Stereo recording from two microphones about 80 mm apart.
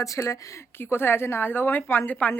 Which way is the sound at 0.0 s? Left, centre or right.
Left.